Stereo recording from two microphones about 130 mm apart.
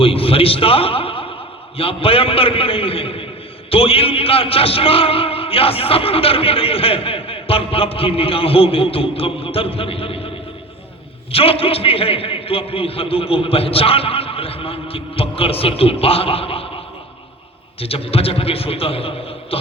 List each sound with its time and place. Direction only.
0.0 s a sound: 45° left (ahead or behind)
1.8 s a man's voice: 45° left (ahead or behind)
11.3 s a man's voice: 45° left (ahead or behind)
17.7 s a man's voice: 45° left (ahead or behind)